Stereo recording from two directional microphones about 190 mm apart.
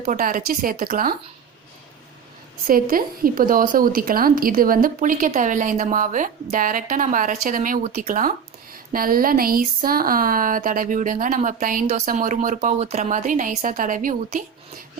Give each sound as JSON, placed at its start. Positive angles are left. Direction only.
{"t": 0.0, "sound": "speech", "side_deg": -45}
{"t": 2.6, "sound": "speech", "side_deg": -50}